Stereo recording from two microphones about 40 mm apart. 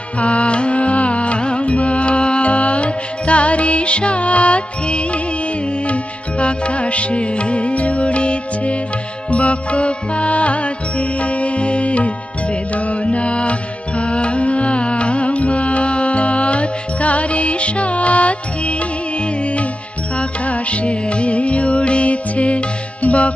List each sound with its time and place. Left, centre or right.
0.2 s music: left
20.2 s music: left